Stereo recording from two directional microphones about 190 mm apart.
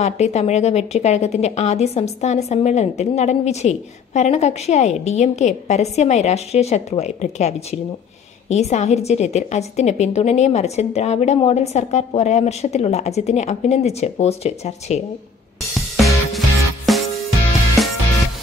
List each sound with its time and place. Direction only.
0.0 s speech: 35° left (ahead or behind)
15.7 s music: centre (ahead or behind)